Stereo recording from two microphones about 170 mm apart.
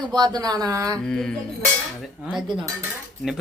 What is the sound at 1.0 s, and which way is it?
Speech, 5° left (ahead or behind).